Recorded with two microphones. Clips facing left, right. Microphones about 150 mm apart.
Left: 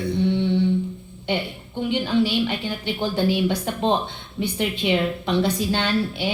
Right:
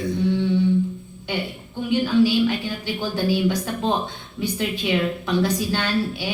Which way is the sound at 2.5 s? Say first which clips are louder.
Right 1 dB; 25° left (ahead or behind).